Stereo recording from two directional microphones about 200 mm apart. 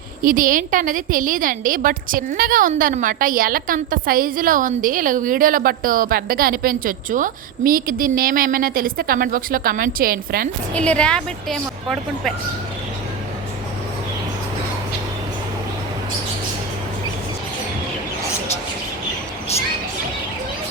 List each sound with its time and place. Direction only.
0.2 s a woman's voice: 45° right (ahead or behind)
10.8 s speech: 5° left (ahead or behind)